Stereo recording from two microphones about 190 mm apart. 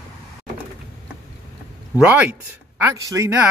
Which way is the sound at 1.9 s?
10° right (ahead or behind).